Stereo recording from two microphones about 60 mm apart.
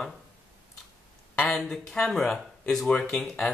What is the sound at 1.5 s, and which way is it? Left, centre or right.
Speech, centre.